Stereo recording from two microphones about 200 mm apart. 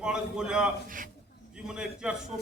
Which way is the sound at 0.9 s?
45° right (ahead or behind).